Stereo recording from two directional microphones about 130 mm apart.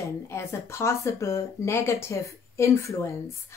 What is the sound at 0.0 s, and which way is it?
Speech, 20° left (ahead or behind).